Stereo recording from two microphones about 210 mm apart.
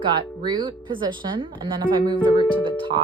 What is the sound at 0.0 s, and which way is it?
Speech, 20° right (ahead or behind).